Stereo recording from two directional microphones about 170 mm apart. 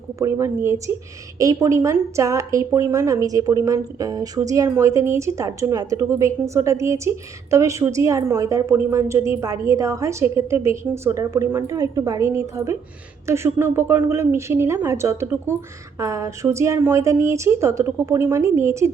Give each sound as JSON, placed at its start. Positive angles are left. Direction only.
{"t": 0.2, "sound": "a woman's voice", "side_deg": -15}